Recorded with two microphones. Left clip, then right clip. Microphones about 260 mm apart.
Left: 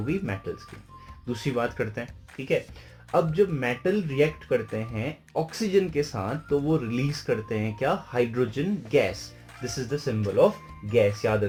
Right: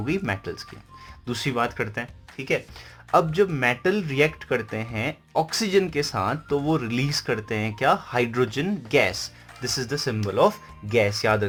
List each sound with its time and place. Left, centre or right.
0.0 s speech: right
2.4 s speech: right
3.1 s speech: right